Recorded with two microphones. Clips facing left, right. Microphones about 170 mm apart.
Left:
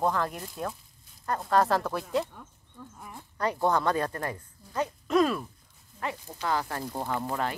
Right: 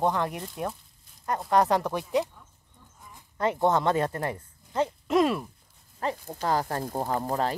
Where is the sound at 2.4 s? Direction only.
70° left (ahead or behind).